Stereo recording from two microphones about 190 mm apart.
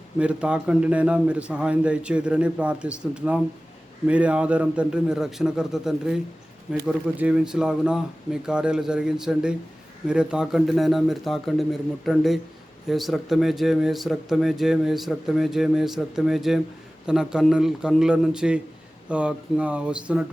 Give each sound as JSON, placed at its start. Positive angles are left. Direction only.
{"t": 0.2, "sound": "speech", "side_deg": -5}